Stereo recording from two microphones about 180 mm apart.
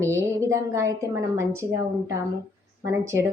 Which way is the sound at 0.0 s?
15° right (ahead or behind).